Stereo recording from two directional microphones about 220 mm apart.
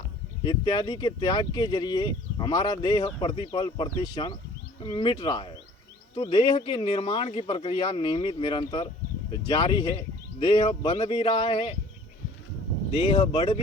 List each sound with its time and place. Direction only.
0.4 s speech: 20° left (ahead or behind)
13.1 s speech: 25° left (ahead or behind)